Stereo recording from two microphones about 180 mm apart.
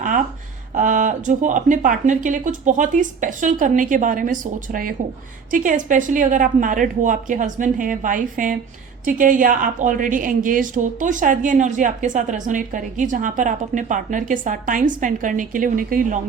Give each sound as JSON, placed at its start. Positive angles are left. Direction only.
{"t": 0.7, "sound": "a woman's voice", "side_deg": -45}